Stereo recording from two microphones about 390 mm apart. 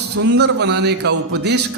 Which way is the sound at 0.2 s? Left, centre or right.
Right.